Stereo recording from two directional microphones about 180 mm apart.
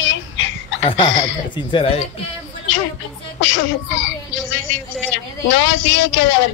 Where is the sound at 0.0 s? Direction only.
90° left.